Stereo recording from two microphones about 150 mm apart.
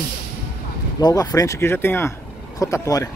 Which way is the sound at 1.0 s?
25° left (ahead or behind).